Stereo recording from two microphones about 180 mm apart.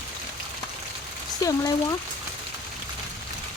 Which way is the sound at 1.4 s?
20° left (ahead or behind).